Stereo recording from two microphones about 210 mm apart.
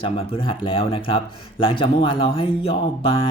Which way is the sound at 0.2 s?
25° left (ahead or behind).